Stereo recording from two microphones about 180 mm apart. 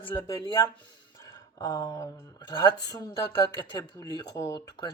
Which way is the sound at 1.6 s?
20° left (ahead or behind).